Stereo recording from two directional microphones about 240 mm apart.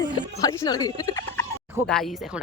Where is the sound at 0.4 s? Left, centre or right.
Centre.